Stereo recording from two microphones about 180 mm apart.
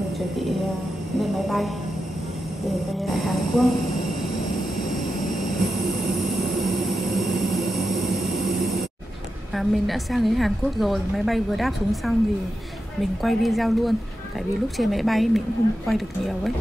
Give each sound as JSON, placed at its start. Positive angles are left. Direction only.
{"t": 1.2, "sound": "speech", "side_deg": 0}
{"t": 3.0, "sound": "a woman's voice", "side_deg": 0}
{"t": 7.2, "sound": "vehicle", "side_deg": 0}
{"t": 8.5, "sound": "a sound", "side_deg": 0}
{"t": 9.6, "sound": "a woman's voice", "side_deg": 0}
{"t": 13.2, "sound": "a woman's voice", "side_deg": 0}